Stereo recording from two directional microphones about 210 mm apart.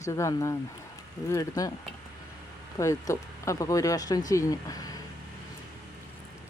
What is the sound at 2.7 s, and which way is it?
Speech, 15° left (ahead or behind).